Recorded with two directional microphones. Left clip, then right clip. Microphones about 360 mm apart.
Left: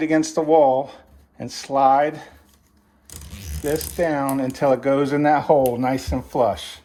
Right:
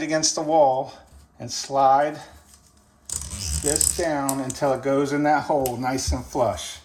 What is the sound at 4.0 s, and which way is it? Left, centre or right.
Speech, centre.